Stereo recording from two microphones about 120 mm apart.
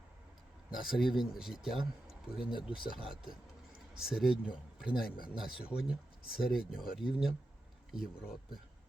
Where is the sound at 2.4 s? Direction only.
45° left (ahead or behind).